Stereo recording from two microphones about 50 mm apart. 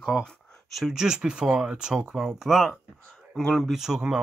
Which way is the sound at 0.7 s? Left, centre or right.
Centre.